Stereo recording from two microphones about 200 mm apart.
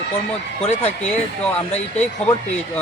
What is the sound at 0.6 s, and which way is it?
Speech, 30° left (ahead or behind).